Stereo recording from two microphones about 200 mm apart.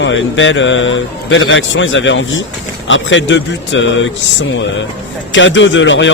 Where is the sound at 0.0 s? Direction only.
70° left (ahead or behind).